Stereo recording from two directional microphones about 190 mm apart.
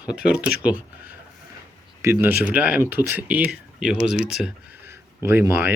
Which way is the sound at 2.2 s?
10° right (ahead or behind).